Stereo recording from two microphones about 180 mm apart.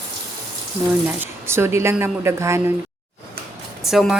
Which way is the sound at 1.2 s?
15° right (ahead or behind).